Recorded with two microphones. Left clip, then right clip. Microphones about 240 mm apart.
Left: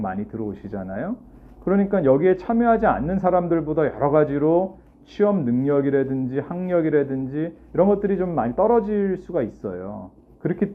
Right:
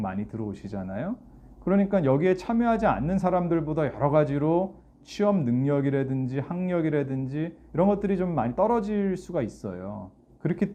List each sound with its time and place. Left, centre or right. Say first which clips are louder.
0.0 s speech: left 5 dB; right